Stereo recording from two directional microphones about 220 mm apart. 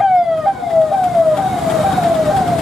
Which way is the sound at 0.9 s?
Centre (ahead or behind).